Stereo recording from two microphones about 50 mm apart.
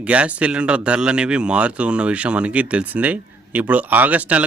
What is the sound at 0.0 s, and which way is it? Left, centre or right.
Speech, right.